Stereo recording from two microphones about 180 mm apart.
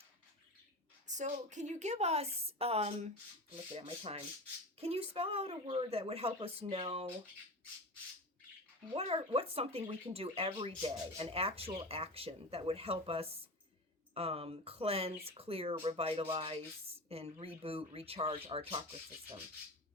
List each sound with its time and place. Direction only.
1.0 s speech: 40° right (ahead or behind)
8.9 s speech: 30° right (ahead or behind)